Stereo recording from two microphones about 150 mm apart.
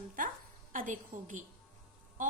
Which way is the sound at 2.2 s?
60° right (ahead or behind).